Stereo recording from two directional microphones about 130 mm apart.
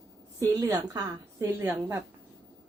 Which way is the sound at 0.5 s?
25° right (ahead or behind).